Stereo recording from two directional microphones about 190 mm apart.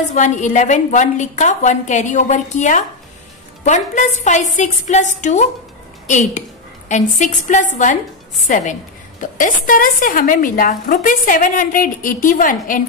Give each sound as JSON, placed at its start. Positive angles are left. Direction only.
{"t": 0.1, "sound": "a woman's voice", "side_deg": 40}